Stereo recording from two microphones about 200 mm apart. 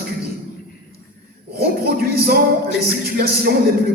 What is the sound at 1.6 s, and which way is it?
A man's voice, 50° right (ahead or behind).